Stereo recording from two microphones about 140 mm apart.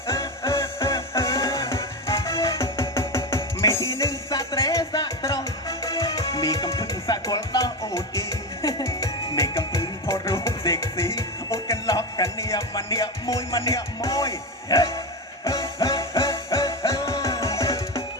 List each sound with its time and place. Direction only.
0.1 s music: 20° left (ahead or behind)